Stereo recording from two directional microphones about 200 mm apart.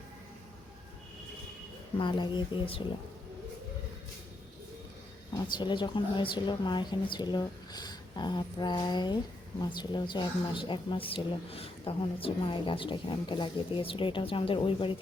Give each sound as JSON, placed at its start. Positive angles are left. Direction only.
{"t": 2.0, "sound": "a woman's voice", "side_deg": 25}
{"t": 5.3, "sound": "a woman's voice", "side_deg": 20}